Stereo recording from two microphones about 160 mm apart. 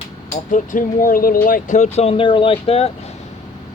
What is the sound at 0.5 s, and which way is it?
Speech, 55° left (ahead or behind).